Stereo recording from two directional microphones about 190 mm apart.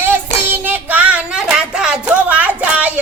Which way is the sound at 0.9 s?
5° right (ahead or behind).